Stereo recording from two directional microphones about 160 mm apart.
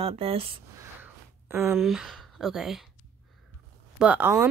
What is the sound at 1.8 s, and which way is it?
Speech, centre (ahead or behind).